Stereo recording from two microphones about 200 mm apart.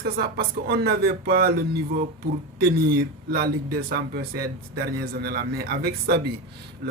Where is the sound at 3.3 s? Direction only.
50° right (ahead or behind).